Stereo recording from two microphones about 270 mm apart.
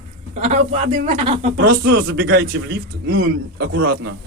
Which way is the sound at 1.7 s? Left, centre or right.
Right.